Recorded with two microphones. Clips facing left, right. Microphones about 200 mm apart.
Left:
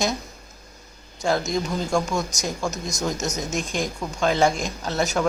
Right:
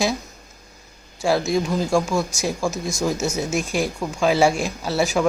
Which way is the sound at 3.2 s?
35° left (ahead or behind).